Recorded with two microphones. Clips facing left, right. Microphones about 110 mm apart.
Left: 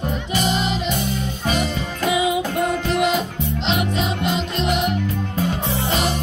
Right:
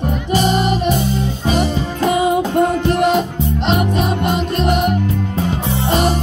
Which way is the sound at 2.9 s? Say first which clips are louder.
Right 5 dB; 55° right (ahead or behind).